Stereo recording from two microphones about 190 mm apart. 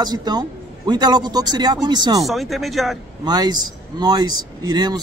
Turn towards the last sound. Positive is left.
turn(degrees=-20)  # may be behind; listen again after turning